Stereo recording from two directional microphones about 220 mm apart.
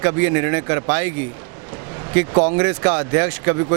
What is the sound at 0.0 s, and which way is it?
Speech, 15° right (ahead or behind).